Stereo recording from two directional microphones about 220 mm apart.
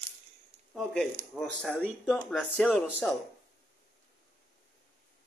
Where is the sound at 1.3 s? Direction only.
Centre (ahead or behind).